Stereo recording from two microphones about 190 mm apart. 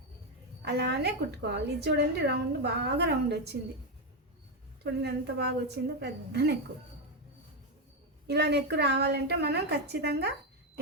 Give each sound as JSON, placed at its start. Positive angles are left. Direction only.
{"t": 0.6, "sound": "a woman's voice", "side_deg": -60}
{"t": 4.8, "sound": "a woman's voice", "side_deg": -60}
{"t": 8.3, "sound": "a woman's voice", "side_deg": -60}